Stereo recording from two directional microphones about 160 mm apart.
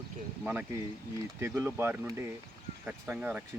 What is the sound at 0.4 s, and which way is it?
Speech, 10° right (ahead or behind).